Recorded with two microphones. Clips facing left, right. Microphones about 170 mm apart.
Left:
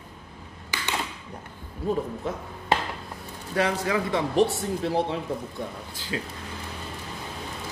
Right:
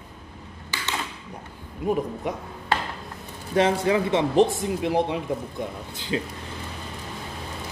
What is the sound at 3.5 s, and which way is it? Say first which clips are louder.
Speech: right 4 dB; 25° right (ahead or behind).